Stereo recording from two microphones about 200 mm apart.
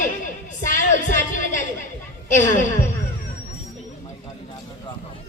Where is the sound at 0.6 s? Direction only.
40° left (ahead or behind).